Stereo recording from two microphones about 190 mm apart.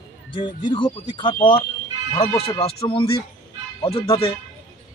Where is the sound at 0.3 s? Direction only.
25° left (ahead or behind).